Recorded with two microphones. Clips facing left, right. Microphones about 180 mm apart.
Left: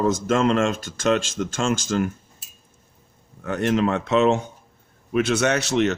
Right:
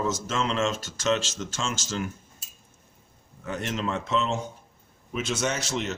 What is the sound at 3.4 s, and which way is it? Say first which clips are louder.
Speech: left 9 dB; 60° left (ahead or behind).